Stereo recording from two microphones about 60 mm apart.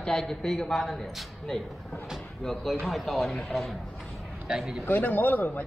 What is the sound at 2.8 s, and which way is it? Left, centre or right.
Speech, centre.